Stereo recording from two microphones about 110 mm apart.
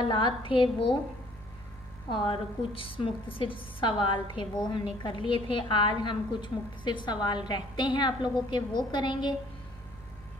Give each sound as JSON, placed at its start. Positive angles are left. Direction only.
{"t": 0.0, "sound": "a woman's voice", "side_deg": 45}
{"t": 2.0, "sound": "a woman's voice", "side_deg": 50}